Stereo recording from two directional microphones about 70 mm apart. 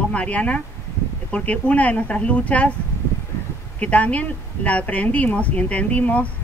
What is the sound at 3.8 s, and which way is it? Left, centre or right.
Speech, centre.